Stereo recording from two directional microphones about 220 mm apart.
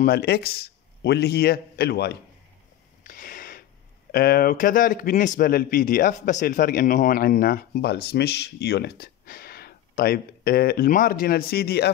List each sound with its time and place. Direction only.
0.0 s speech: 45° left (ahead or behind)
3.0 s a sound: 40° left (ahead or behind)
4.1 s speech: 40° left (ahead or behind)